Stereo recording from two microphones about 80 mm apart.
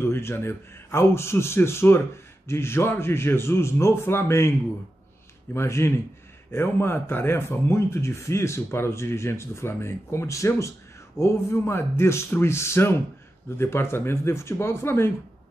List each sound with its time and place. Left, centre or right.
0.0 s a man's voice: left